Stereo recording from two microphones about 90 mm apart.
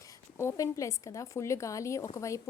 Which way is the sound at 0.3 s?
35° left (ahead or behind).